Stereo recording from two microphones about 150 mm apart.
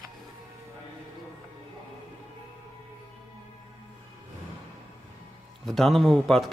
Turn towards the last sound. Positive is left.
turn(degrees=0)  # may be behind; listen again after turning